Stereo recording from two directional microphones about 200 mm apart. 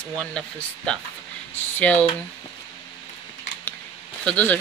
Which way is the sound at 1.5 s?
10° left (ahead or behind).